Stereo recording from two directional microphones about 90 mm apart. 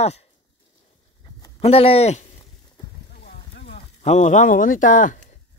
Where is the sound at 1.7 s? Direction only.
90° left.